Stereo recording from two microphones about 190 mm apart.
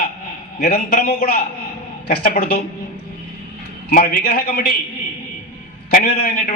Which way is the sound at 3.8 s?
50° left (ahead or behind).